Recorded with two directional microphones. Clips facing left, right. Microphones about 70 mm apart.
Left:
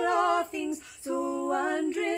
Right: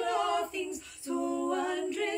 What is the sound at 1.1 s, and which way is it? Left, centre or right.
A capella, centre.